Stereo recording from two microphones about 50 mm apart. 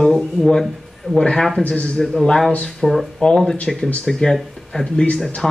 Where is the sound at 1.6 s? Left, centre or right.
Left.